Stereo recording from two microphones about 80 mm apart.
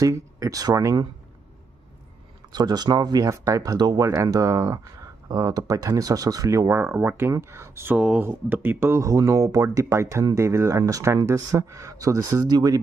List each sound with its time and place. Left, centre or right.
0.0 s speech: right
2.5 s speech: right
12.4 s speech: right